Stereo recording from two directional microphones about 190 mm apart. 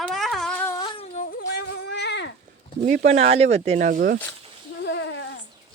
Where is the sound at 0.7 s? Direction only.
25° left (ahead or behind).